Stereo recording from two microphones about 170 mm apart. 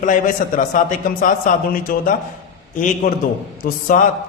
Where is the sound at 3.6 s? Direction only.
55° left (ahead or behind).